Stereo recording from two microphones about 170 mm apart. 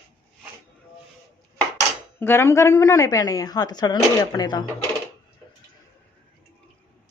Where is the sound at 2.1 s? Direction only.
15° left (ahead or behind).